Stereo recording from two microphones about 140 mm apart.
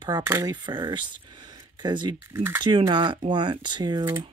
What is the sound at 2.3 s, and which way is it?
Speech, 15° right (ahead or behind).